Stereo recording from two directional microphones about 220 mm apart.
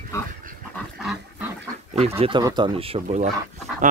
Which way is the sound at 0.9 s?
5° right (ahead or behind).